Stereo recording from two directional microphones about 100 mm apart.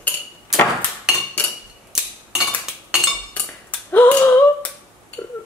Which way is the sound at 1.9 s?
5° right (ahead or behind).